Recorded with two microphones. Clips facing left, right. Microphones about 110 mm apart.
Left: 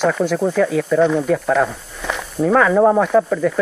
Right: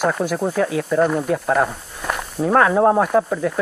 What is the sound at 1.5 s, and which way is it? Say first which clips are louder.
Snake: left 2 dB; 10° right (ahead or behind).